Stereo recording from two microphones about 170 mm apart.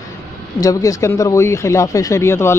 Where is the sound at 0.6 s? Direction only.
20° left (ahead or behind).